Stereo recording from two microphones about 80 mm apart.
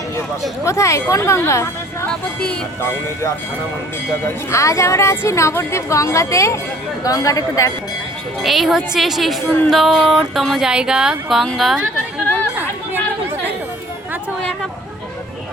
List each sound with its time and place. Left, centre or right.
0.6 s a woman's voice: left
2.0 s speech: centre
4.5 s a woman's voice: left
8.4 s a sound: centre
10.7 s speech: centre
11.5 s a sound: centre